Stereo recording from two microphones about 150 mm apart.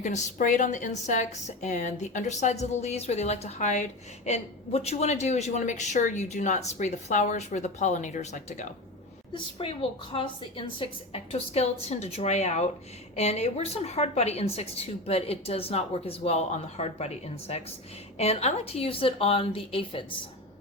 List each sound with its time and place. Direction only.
0.0 s a woman's voice: 60° left (ahead or behind)
9.3 s a woman's voice: 35° left (ahead or behind)